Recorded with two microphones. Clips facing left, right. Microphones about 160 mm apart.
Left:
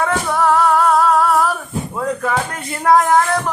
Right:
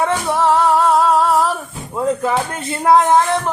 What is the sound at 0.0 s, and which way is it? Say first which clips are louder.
Music: right 1 dB; 25° right (ahead or behind).